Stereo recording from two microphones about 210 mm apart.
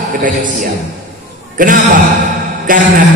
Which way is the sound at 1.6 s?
40° right (ahead or behind).